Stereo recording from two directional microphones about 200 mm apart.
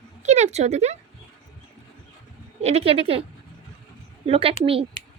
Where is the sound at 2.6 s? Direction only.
30° right (ahead or behind).